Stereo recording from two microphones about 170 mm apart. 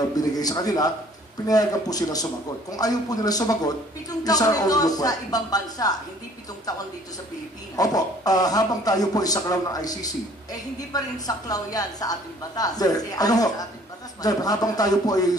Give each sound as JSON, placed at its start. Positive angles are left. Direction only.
{"t": 0.3, "sound": "speech", "side_deg": 20}
{"t": 7.7, "sound": "speech", "side_deg": 20}